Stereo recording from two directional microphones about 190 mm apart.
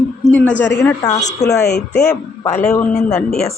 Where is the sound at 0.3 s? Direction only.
10° left (ahead or behind).